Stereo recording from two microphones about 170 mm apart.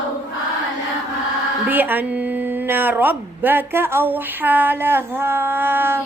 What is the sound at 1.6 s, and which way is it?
A woman's voice, 10° right (ahead or behind).